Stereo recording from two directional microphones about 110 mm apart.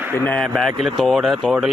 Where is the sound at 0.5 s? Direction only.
Centre (ahead or behind).